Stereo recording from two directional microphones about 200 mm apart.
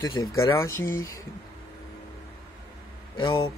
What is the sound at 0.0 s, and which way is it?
Speech, 20° left (ahead or behind).